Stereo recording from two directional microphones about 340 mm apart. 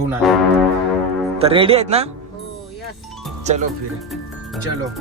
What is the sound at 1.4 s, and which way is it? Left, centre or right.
Speech, centre.